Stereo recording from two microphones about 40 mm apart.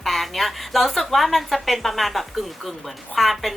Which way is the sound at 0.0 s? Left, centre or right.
Centre.